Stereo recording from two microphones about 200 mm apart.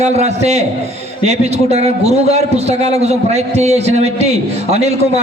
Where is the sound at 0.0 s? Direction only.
35° right (ahead or behind).